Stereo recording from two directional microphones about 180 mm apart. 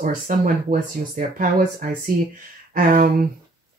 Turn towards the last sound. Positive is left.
turn(degrees=-50)  # may be behind; listen again after turning